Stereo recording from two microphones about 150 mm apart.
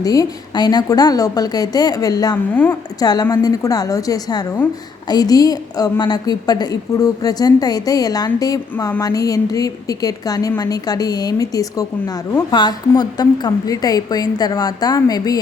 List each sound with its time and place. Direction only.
0.0 s a woman's voice: 25° left (ahead or behind)